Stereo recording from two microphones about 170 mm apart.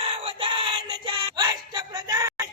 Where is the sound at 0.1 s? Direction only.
35° right (ahead or behind).